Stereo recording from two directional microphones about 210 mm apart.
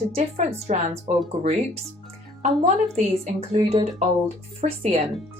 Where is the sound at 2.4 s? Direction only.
35° right (ahead or behind).